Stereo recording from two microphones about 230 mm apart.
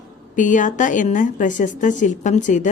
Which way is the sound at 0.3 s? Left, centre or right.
Left.